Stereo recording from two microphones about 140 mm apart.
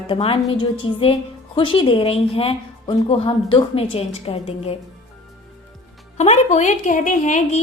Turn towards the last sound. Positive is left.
turn(degrees=60)  # may be behind; listen again after turning